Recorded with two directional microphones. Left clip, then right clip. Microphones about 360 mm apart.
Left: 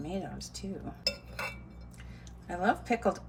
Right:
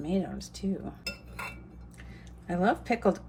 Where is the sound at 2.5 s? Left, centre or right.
Centre.